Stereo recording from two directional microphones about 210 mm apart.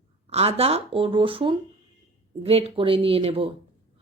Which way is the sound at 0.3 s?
30° right (ahead or behind).